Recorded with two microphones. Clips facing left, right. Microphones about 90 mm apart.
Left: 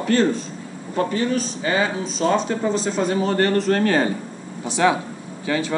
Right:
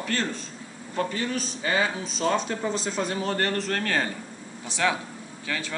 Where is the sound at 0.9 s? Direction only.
Centre (ahead or behind).